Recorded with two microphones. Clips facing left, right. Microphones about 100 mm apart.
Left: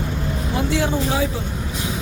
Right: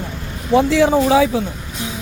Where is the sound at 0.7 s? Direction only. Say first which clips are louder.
Right 6 dB; 90° right.